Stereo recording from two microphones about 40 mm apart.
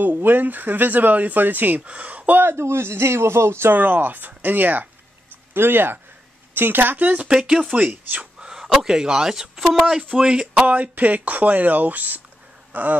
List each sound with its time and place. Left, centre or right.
0.0 s speech: right
1.9 s speech: right
2.3 s speech: right
3.7 s speech: right
5.5 s speech: right
7.3 s speech: centre
7.8 s speech: right
8.4 s speech: centre
10.7 s speech: right